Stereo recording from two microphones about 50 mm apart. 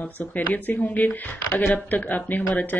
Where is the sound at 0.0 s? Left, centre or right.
Left.